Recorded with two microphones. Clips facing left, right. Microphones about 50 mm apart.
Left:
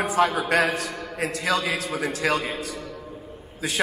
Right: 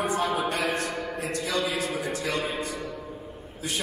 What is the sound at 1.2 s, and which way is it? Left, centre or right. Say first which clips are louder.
Speech: left 5 dB; left.